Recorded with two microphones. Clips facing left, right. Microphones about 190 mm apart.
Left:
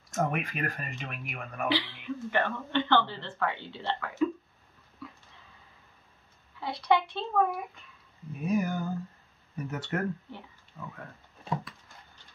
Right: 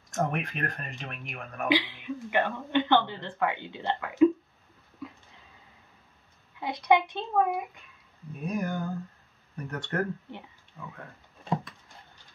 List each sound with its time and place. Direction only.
0.1 s speech: centre (ahead or behind)
1.7 s speech: 15° right (ahead or behind)
6.6 s a child's voice: 20° right (ahead or behind)
8.4 s speech: 5° left (ahead or behind)